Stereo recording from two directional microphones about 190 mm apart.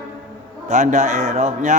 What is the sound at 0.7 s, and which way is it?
A man's voice, 35° right (ahead or behind).